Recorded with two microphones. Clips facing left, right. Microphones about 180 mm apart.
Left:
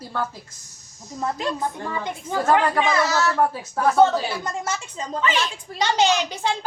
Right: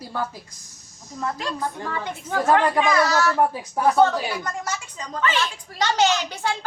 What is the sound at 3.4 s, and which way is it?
Speech, 15° right (ahead or behind).